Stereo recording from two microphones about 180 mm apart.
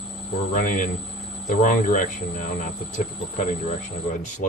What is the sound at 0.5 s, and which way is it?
Speech, 45° left (ahead or behind).